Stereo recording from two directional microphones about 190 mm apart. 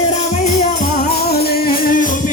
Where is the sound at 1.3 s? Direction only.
55° left (ahead or behind).